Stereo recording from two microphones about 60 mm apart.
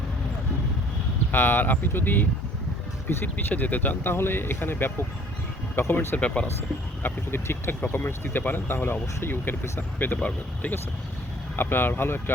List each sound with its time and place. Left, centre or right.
1.3 s speech: left
3.3 s speech: left
6.1 s speech: left
7.0 s speech: left